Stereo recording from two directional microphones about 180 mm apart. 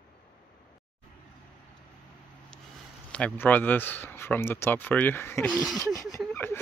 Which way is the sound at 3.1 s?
10° left (ahead or behind).